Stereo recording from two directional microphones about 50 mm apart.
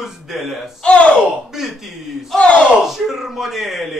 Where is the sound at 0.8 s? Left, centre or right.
Left.